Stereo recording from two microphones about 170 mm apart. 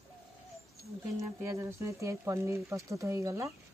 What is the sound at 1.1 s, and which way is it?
Speech, 20° right (ahead or behind).